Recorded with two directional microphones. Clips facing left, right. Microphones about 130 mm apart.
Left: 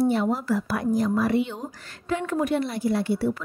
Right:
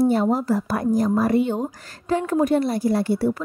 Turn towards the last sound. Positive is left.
turn(degrees=-40)  # may be behind; listen again after turning